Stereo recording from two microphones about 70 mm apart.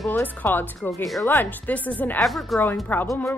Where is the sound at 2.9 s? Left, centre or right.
Left.